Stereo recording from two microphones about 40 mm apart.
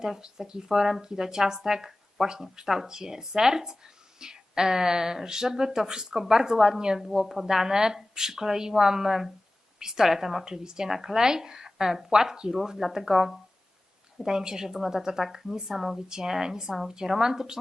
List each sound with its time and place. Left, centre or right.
0.0 s speech: centre